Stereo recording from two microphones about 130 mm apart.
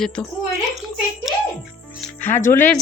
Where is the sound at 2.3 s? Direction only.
15° left (ahead or behind).